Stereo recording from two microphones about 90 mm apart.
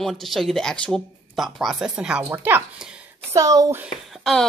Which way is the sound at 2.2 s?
25° right (ahead or behind).